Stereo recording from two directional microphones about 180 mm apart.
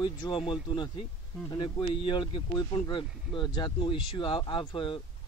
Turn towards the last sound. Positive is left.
turn(degrees=30)  # may be behind; listen again after turning